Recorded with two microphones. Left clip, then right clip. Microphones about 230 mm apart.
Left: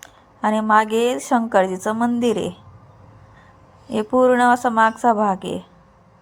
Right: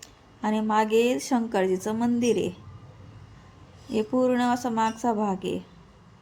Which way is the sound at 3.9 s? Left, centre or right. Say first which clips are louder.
Left 8 dB; centre.